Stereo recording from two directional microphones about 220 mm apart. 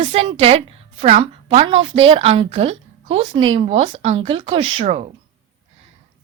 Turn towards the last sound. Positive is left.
turn(degrees=-30)  # may be behind; listen again after turning